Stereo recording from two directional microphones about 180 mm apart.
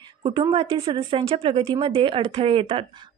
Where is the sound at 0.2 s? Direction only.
25° right (ahead or behind).